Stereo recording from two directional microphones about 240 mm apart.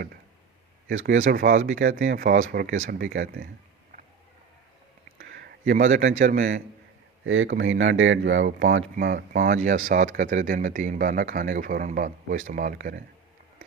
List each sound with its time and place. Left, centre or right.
1.0 s speech: right
5.3 s speech: right
7.3 s speech: right
9.0 s speech: right